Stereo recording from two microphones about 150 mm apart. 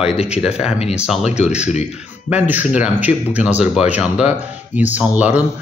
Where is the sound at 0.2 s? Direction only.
5° right (ahead or behind).